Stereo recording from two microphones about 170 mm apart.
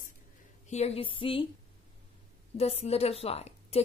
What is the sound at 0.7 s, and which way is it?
Speech, 35° left (ahead or behind).